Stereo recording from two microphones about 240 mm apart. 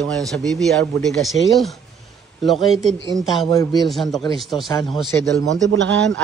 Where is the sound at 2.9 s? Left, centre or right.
Centre.